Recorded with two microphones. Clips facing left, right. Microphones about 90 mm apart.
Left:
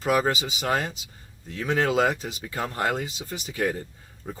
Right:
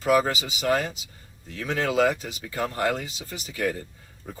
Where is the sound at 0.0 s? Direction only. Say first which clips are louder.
Right 1 dB; 30° left (ahead or behind).